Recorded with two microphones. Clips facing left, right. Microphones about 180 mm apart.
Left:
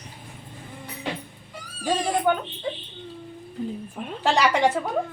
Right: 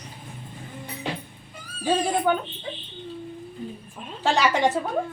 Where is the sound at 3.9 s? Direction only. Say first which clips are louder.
Left 5 dB; 55° left (ahead or behind).